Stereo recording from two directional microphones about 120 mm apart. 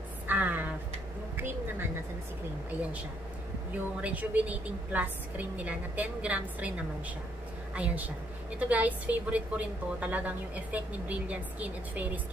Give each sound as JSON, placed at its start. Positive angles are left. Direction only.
{"t": 0.3, "sound": "a sound", "side_deg": -15}
{"t": 4.0, "sound": "a woman's voice", "side_deg": -10}
{"t": 7.7, "sound": "a woman's voice", "side_deg": -10}